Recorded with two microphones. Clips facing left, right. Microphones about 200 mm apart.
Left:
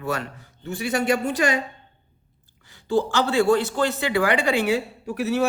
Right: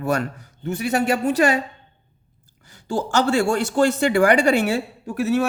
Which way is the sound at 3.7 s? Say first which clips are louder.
Right 5 dB; 45° right (ahead or behind).